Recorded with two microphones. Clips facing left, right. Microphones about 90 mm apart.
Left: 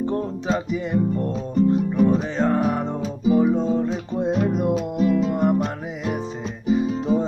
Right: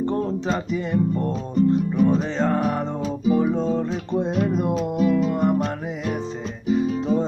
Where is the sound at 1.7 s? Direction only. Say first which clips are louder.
Left 1 dB; 5° left (ahead or behind).